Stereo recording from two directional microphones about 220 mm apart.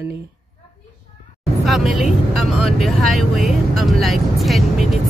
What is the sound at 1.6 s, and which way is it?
Speech, centre (ahead or behind).